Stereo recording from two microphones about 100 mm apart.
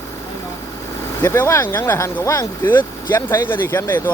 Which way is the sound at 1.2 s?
25° left (ahead or behind).